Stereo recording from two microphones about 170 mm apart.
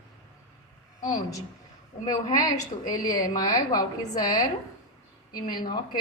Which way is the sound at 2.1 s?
25° left (ahead or behind).